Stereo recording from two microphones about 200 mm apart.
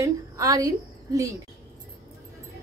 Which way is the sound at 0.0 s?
15° right (ahead or behind).